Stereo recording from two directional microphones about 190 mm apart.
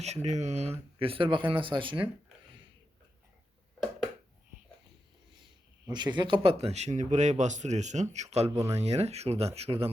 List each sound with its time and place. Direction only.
0.0 s speech: 35° right (ahead or behind)
5.4 s speech: 25° right (ahead or behind)
8.4 s speech: 15° right (ahead or behind)
8.7 s speech: 35° right (ahead or behind)